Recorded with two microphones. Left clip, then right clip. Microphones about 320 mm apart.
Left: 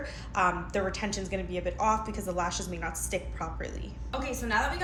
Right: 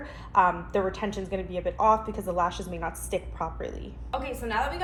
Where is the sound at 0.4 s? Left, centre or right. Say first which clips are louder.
Right 3 dB; centre.